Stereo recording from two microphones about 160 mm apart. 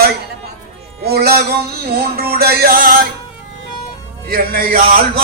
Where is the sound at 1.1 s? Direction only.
80° right.